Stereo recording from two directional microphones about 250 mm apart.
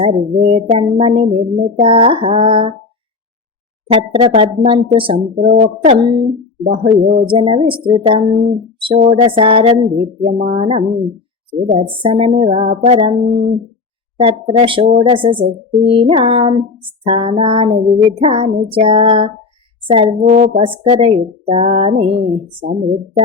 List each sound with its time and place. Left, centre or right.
0.0 s speech: right
3.9 s speech: right
14.2 s speech: right